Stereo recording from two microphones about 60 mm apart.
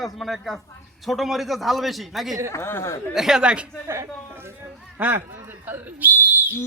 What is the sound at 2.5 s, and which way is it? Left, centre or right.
Speech, left.